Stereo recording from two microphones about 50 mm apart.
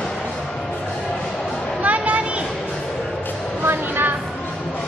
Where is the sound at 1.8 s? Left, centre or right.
Right.